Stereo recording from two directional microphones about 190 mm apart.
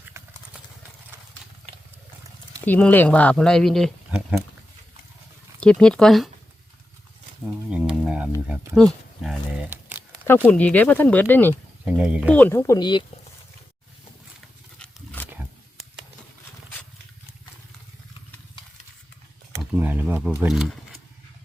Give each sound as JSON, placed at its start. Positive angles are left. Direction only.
{"t": 0.1, "sound": "horse", "side_deg": -15}
{"t": 2.6, "sound": "speech", "side_deg": 10}
{"t": 5.5, "sound": "speech", "side_deg": 5}
{"t": 7.7, "sound": "a sound", "side_deg": -5}
{"t": 8.7, "sound": "speech", "side_deg": 0}
{"t": 10.2, "sound": "speech", "side_deg": 10}
{"t": 11.9, "sound": "speech", "side_deg": -5}
{"t": 12.3, "sound": "speech", "side_deg": 10}
{"t": 14.8, "sound": "wild animals", "side_deg": 10}
{"t": 19.7, "sound": "speech", "side_deg": -10}